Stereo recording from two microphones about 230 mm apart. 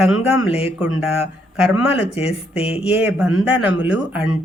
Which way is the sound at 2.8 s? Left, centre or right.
Centre.